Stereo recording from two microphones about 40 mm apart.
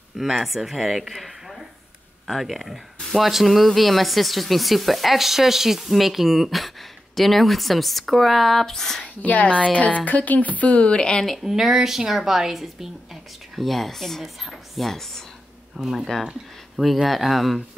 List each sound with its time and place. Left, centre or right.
0.2 s speech: centre
9.0 s speech: left
11.4 s speech: centre
13.6 s speech: centre
14.9 s speech: centre
15.7 s speech: centre
16.8 s speech: centre